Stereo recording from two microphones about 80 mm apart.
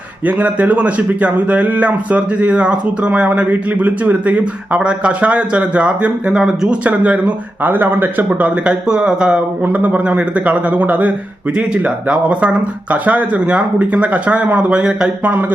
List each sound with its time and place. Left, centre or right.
0.3 s speech: centre
6.8 s speech: centre
8.3 s speech: centre